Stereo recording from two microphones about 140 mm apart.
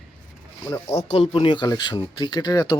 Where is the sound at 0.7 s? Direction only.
20° left (ahead or behind).